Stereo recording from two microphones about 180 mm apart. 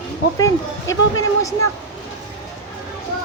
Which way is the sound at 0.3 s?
20° left (ahead or behind).